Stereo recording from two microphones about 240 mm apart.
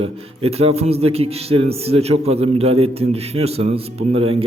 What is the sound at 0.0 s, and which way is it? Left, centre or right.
Speech, right.